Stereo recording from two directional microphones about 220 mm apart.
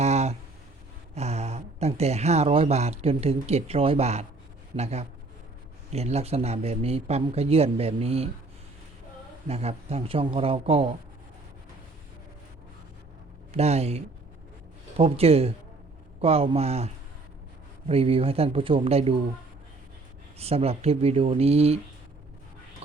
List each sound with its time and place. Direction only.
0.0 s a sound: 30° right (ahead or behind)
1.1 s speech: 30° right (ahead or behind)
9.5 s speech: 30° right (ahead or behind)
13.5 s speech: 30° right (ahead or behind)
20.4 s speech: 25° right (ahead or behind)